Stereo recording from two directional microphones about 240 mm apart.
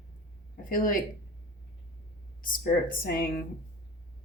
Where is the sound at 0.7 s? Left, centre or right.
Left.